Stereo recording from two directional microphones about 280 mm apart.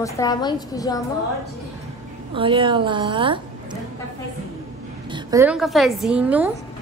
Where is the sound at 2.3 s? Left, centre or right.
Centre.